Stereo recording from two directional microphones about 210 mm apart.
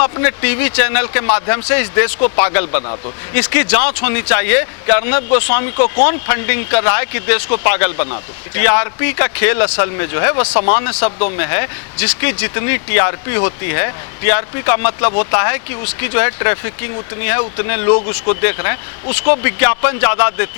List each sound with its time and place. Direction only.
0.0 s speech: 15° left (ahead or behind)